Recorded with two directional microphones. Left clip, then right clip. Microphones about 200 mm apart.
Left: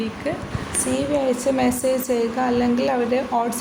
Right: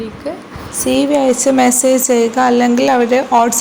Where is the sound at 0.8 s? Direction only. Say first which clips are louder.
Right 9 dB; 35° right (ahead or behind).